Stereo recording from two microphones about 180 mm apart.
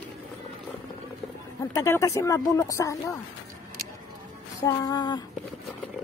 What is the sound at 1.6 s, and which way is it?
Speech, 15° left (ahead or behind).